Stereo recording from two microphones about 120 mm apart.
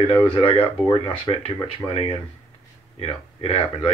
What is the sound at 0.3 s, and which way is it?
Speech, 50° left (ahead or behind).